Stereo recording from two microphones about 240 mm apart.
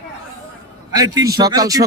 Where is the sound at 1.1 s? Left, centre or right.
Centre.